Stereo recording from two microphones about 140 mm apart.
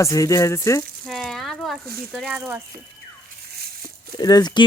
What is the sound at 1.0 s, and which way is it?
Rattle, centre (ahead or behind).